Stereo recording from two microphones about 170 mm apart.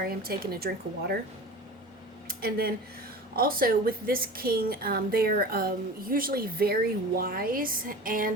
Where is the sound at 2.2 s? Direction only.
60° right (ahead or behind).